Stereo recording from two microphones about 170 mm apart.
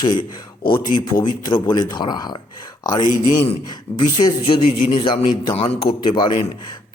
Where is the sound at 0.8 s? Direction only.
55° left (ahead or behind).